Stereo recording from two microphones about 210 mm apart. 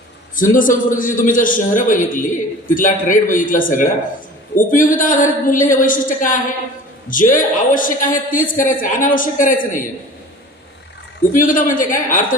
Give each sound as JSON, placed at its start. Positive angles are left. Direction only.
{"t": 0.3, "sound": "a man's voice", "side_deg": 40}
{"t": 11.2, "sound": "a man's voice", "side_deg": 40}